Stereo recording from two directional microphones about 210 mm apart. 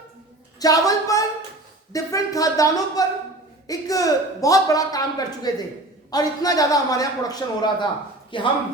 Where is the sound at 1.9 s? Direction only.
15° left (ahead or behind).